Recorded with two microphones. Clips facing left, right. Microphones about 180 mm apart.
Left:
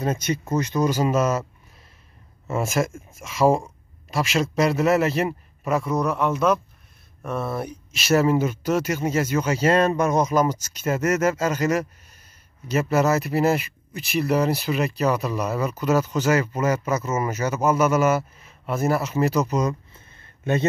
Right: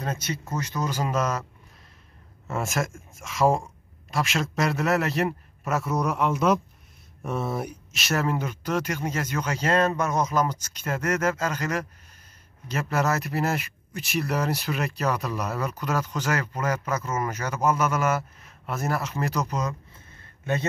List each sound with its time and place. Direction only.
0.1 s speech: 15° left (ahead or behind)
2.5 s speech: centre (ahead or behind)
7.9 s speech: centre (ahead or behind)